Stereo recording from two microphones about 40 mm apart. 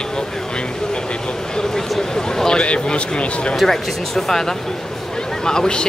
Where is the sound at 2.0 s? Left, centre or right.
Centre.